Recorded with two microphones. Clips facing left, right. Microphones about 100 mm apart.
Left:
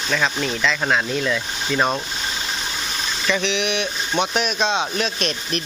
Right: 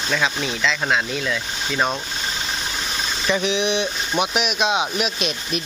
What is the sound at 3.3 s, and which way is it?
Speech, 15° right (ahead or behind).